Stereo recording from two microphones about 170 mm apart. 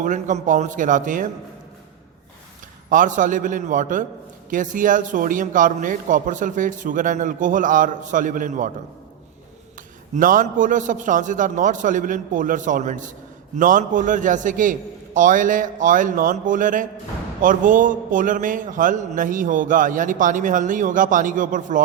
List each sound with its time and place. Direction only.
0.0 s a man's voice: 45° right (ahead or behind)
2.9 s a man's voice: 50° right (ahead or behind)
10.2 s a man's voice: 50° right (ahead or behind)